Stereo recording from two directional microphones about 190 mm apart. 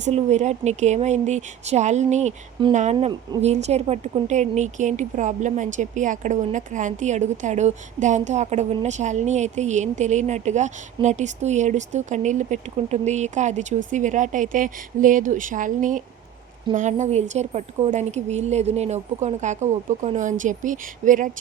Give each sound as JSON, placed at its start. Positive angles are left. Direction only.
{"t": 0.0, "sound": "a woman's voice", "side_deg": -35}